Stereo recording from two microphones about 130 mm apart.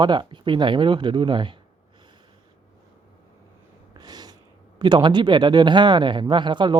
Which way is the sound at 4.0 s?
30° right (ahead or behind).